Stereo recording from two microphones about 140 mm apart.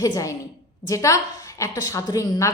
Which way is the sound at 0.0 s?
25° left (ahead or behind).